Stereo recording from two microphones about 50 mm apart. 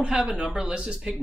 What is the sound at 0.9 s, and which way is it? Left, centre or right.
Speech, centre.